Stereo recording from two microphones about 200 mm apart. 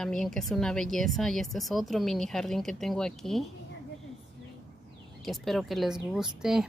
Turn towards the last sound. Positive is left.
turn(degrees=0)  # may be behind; listen again after turning